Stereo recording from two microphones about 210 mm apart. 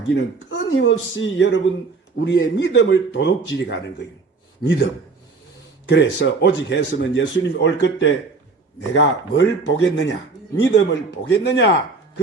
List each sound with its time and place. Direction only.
0.1 s speech: 60° left (ahead or behind)
5.9 s speech: 60° left (ahead or behind)